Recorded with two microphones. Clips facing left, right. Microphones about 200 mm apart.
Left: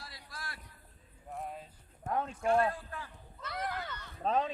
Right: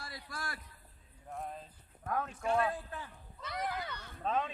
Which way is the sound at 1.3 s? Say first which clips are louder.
Left 1 dB; 5° left (ahead or behind).